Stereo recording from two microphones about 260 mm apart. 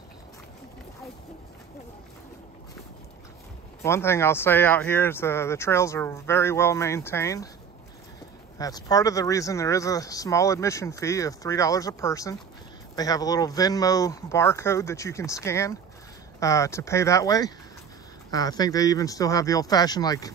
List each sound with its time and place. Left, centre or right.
3.8 s speech: centre
8.5 s speech: centre